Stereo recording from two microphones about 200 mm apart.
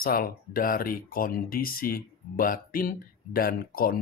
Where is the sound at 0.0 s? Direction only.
45° left (ahead or behind).